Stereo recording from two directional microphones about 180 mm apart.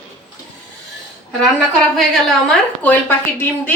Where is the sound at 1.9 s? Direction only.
Centre (ahead or behind).